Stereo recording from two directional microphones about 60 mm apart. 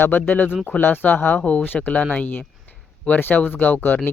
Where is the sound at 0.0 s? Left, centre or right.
Left.